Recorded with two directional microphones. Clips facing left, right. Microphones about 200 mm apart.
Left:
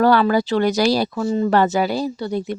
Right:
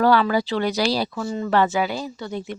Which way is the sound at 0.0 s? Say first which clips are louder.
Left 3 dB; 45° left (ahead or behind).